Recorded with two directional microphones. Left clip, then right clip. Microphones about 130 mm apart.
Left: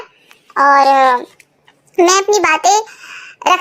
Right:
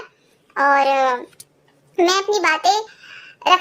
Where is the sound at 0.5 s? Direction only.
25° left (ahead or behind).